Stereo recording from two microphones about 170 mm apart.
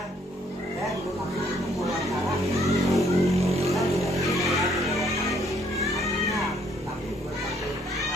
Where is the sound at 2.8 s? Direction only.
Centre (ahead or behind).